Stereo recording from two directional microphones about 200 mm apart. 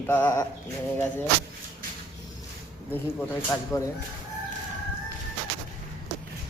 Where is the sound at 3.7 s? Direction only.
15° left (ahead or behind).